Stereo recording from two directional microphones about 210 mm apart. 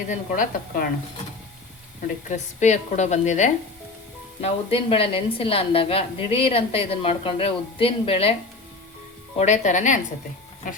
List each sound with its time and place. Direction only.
0.1 s a woman's voice: 40° left (ahead or behind)
2.3 s a woman's voice: 35° left (ahead or behind)
9.4 s a woman's voice: 35° left (ahead or behind)